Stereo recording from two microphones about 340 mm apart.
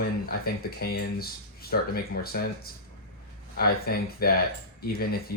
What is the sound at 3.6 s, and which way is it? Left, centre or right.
Speech, left.